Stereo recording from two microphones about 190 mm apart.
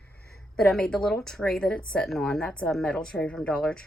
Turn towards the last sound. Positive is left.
turn(degrees=5)  # may be behind; listen again after turning